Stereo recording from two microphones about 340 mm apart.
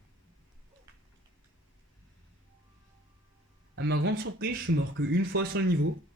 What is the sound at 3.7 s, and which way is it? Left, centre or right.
Speech, right.